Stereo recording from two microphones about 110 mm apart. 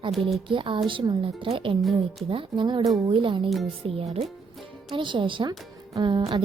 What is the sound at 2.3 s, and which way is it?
A woman's voice, 50° right (ahead or behind).